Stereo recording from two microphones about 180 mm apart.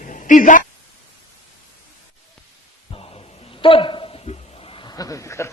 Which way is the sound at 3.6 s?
30° left (ahead or behind).